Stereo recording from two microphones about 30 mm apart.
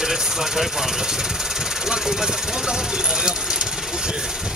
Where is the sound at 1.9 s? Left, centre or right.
Centre.